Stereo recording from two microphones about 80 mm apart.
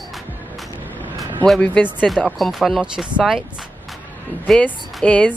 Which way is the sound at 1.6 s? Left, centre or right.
Centre.